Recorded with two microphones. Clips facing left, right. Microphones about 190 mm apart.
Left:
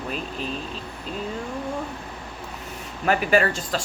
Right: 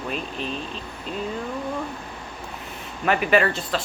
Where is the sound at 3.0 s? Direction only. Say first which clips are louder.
Even; 40° left (ahead or behind).